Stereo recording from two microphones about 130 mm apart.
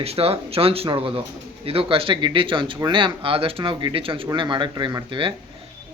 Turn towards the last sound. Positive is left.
turn(degrees=-30)  # may be behind; listen again after turning